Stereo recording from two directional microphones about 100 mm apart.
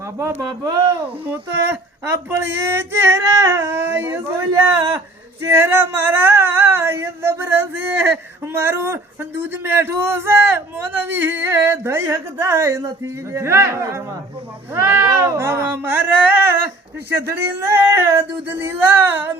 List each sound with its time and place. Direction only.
0.2 s speech: 30° right (ahead or behind)
1.2 s speech: 15° right (ahead or behind)
2.3 s a sound: 25° right (ahead or behind)